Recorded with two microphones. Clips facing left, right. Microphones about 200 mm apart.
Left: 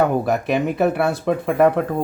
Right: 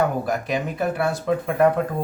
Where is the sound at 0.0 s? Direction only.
65° left (ahead or behind).